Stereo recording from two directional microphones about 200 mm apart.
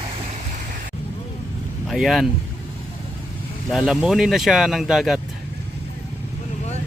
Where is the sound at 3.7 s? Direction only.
5° right (ahead or behind).